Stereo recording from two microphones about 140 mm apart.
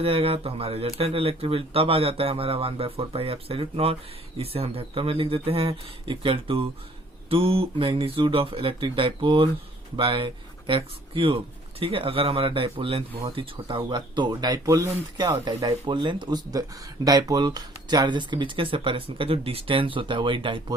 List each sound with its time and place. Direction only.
0.0 s speech: 45° right (ahead or behind); by 15.4 s 20° right (ahead or behind)
15.4 s speech: 35° right (ahead or behind)